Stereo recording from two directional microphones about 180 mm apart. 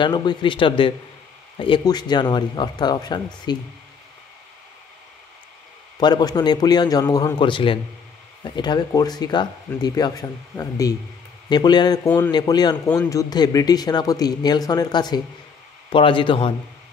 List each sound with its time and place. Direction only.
0.0 s a man's voice: 25° left (ahead or behind)
5.9 s a man's voice: 25° left (ahead or behind)